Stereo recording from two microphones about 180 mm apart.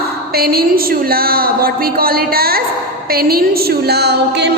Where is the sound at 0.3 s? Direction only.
60° right (ahead or behind).